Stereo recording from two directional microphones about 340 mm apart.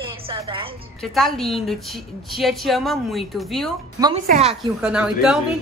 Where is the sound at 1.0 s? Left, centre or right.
Centre.